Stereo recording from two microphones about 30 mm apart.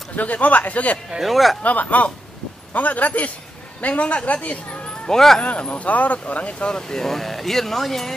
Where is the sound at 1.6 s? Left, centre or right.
Left.